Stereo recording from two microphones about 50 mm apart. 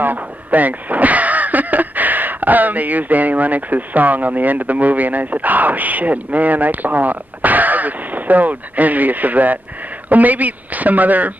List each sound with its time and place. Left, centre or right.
0.0 s speech: right